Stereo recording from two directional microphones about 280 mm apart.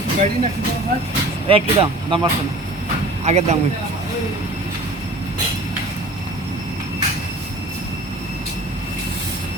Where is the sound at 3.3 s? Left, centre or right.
Right.